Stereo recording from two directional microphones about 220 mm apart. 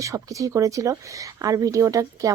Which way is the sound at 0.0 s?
15° right (ahead or behind).